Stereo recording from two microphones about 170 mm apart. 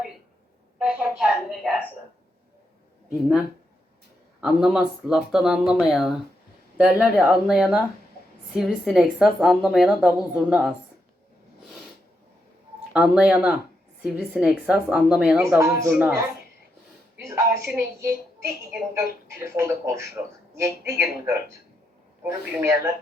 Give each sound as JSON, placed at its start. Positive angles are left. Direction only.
{"t": 0.8, "sound": "a woman's voice", "side_deg": -5}
{"t": 3.1, "sound": "a woman's voice", "side_deg": -5}
{"t": 12.9, "sound": "a woman's voice", "side_deg": -5}